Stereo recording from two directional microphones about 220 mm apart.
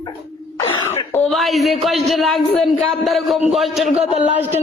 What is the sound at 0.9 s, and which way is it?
A woman's voice, 5° left (ahead or behind).